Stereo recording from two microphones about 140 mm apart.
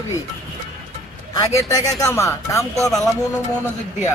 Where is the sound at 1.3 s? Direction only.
25° left (ahead or behind).